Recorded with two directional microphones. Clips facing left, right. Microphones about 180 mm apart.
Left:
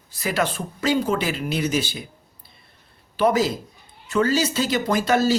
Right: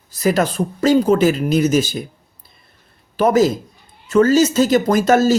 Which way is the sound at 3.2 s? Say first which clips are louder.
Right 5 dB; 45° right (ahead or behind).